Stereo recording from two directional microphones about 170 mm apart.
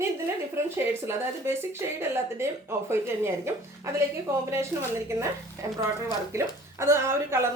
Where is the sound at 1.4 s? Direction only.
15° right (ahead or behind).